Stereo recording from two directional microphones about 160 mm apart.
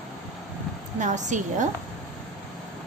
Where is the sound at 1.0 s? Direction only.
50° right (ahead or behind).